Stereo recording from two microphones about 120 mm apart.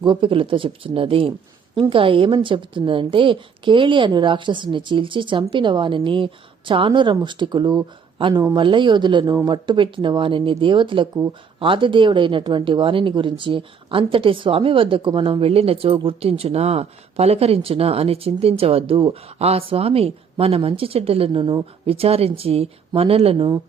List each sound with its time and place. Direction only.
0.0 s speech: 45° right (ahead or behind)